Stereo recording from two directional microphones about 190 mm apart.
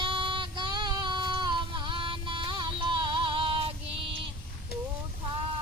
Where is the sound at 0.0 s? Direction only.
25° right (ahead or behind).